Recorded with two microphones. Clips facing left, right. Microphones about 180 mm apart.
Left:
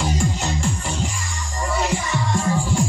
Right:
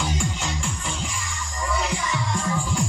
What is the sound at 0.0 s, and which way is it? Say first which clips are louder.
Music: left 4 dB; 40° left (ahead or behind).